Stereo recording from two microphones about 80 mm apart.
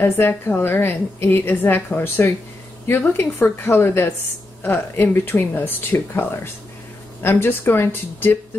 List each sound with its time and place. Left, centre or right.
0.6 s speech: left